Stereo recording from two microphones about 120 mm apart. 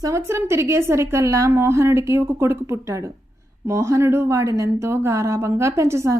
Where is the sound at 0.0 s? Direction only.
25° right (ahead or behind).